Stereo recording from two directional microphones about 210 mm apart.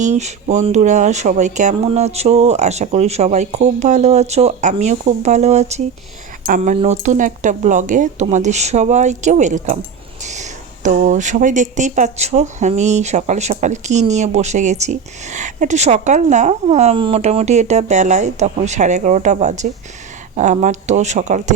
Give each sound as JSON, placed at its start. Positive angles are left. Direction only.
{"t": 0.0, "sound": "speech", "side_deg": -35}